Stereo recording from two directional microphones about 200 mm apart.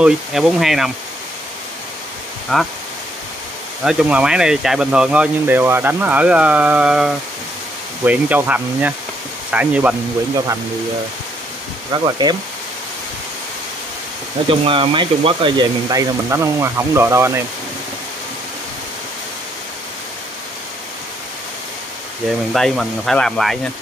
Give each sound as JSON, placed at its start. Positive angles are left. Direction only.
{"t": 0.0, "sound": "speech", "side_deg": 0}
{"t": 2.5, "sound": "speech", "side_deg": 0}
{"t": 3.8, "sound": "speech", "side_deg": -5}
{"t": 11.9, "sound": "speech", "side_deg": -20}
{"t": 14.5, "sound": "speech", "side_deg": -25}
{"t": 22.5, "sound": "speech", "side_deg": 0}